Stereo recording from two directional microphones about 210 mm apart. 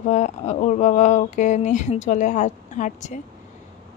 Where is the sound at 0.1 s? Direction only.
35° left (ahead or behind).